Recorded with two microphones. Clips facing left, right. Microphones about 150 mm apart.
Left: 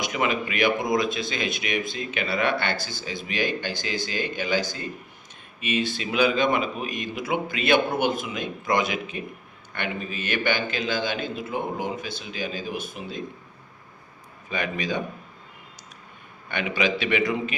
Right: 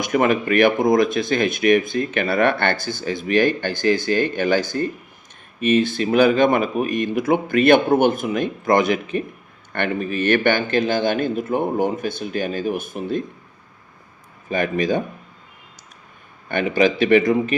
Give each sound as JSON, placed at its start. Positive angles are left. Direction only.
{"t": 0.0, "sound": "a man's voice", "side_deg": -50}
{"t": 14.5, "sound": "a man's voice", "side_deg": -50}
{"t": 16.5, "sound": "a man's voice", "side_deg": -50}